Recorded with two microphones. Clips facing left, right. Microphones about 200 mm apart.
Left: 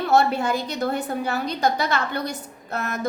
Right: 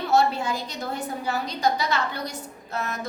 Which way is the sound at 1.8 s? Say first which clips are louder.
Left 2 dB; 55° left (ahead or behind).